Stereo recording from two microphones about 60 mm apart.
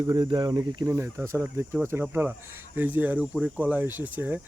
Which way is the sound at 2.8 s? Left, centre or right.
Right.